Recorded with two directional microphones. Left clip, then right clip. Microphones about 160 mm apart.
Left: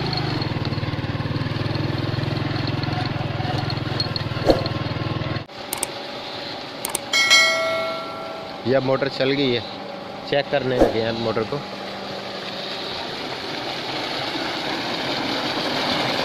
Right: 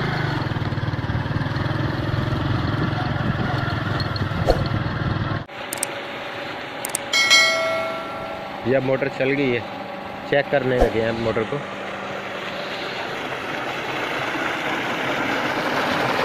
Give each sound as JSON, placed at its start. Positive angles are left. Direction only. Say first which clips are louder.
{"t": 7.1, "sound": "bell", "louder": "even", "side_deg": 0}
{"t": 8.6, "sound": "speech", "louder": "left 1 dB", "side_deg": 10}
{"t": 10.3, "sound": "speech", "louder": "right 1 dB", "side_deg": -5}
{"t": 13.9, "sound": "vehicle", "louder": "right 2 dB", "side_deg": 10}